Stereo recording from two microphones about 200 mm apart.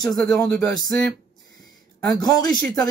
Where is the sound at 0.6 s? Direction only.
15° left (ahead or behind).